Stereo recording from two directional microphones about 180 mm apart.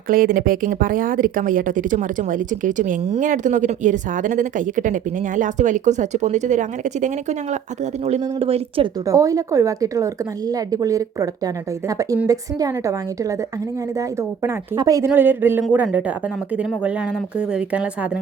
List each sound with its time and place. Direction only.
0.1 s speech: 50° right (ahead or behind); by 8.9 s 30° right (ahead or behind)
9.0 s a woman's voice: 20° right (ahead or behind)
14.4 s speech: 20° right (ahead or behind)